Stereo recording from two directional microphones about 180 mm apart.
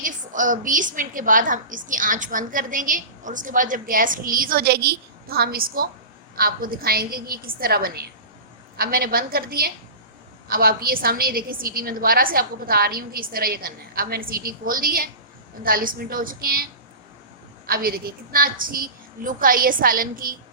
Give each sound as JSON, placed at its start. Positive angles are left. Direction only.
{"t": 0.0, "sound": "a woman's voice", "side_deg": -45}
{"t": 17.7, "sound": "a woman's voice", "side_deg": -55}